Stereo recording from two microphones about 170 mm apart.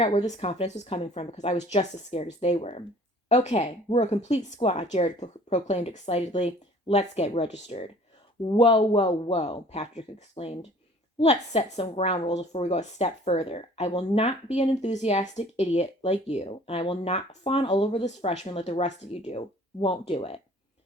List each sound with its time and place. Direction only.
0.0 s a woman's voice: 40° left (ahead or behind)